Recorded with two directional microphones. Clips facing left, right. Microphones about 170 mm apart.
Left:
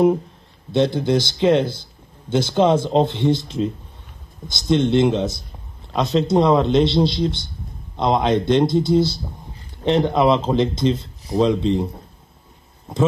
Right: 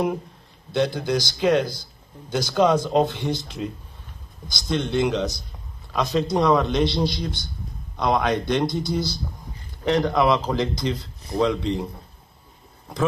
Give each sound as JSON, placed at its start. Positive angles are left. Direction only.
{"t": 0.7, "sound": "a man's voice", "side_deg": 25}